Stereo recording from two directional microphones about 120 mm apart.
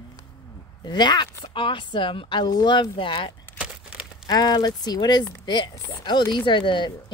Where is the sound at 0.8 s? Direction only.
40° left (ahead or behind).